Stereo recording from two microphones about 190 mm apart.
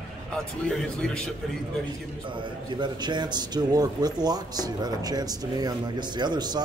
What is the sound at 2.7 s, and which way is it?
A man's voice, 25° right (ahead or behind).